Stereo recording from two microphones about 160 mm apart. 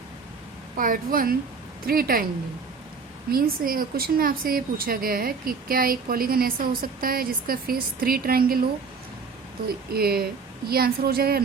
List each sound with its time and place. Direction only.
0.8 s a woman's voice: 60° right (ahead or behind)
3.3 s a woman's voice: 65° right (ahead or behind)
9.9 s a woman's voice: 75° right (ahead or behind)